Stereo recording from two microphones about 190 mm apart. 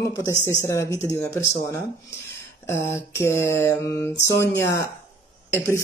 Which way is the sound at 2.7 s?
15° left (ahead or behind).